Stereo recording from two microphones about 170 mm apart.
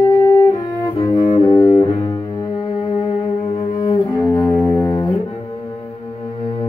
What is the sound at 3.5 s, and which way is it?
Cello, 20° left (ahead or behind).